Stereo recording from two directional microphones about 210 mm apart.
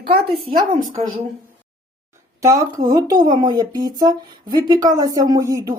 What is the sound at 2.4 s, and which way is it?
A woman's voice, 15° right (ahead or behind).